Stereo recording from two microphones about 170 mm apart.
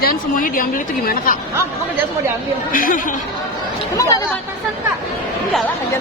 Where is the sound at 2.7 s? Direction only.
55° left (ahead or behind).